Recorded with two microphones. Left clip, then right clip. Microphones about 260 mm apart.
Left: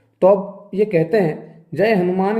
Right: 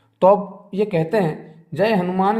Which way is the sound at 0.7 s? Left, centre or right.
Right.